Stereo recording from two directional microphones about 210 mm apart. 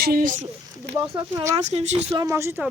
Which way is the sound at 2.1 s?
15° right (ahead or behind).